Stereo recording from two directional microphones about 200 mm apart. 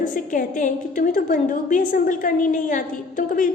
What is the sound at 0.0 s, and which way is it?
A woman's voice, 40° left (ahead or behind).